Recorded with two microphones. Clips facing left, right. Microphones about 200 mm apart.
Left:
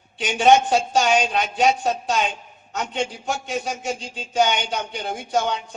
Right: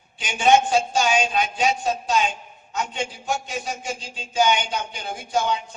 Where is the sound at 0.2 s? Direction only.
65° left (ahead or behind).